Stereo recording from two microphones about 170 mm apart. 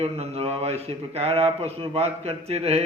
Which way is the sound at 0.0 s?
35° right (ahead or behind).